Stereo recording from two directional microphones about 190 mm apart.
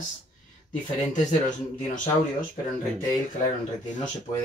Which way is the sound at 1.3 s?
40° left (ahead or behind).